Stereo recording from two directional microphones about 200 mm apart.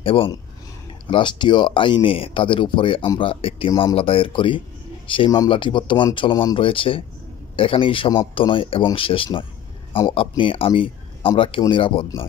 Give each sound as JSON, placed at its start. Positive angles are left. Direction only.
{"t": 0.0, "sound": "speech", "side_deg": 25}